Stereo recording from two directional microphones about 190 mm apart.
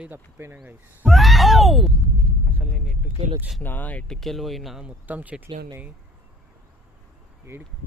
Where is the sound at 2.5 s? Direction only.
10° left (ahead or behind).